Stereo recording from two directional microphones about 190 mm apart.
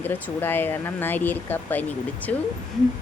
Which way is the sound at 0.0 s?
10° left (ahead or behind).